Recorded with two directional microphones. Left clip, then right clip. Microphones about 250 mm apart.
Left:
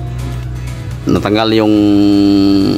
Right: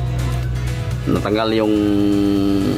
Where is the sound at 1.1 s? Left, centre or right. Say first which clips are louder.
Left 6 dB; left.